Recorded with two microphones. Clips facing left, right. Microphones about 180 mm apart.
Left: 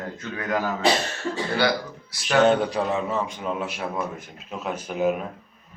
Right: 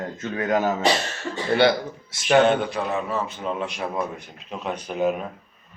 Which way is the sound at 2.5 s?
35° left (ahead or behind).